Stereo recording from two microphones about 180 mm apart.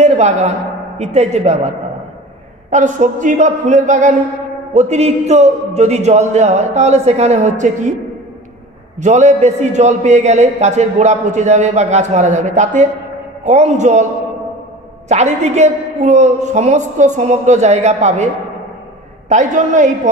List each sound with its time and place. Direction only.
0.0 s a sound: 40° right (ahead or behind)
0.9 s a man's voice: 40° right (ahead or behind)
2.7 s a man's voice: 45° right (ahead or behind)
9.0 s a man's voice: 40° right (ahead or behind)
15.0 s a man's voice: 40° right (ahead or behind)